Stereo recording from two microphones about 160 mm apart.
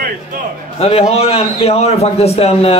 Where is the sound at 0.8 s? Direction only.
40° left (ahead or behind).